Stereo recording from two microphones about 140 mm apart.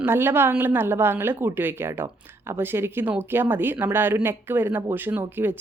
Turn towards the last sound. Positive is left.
turn(degrees=-15)  # may be behind; listen again after turning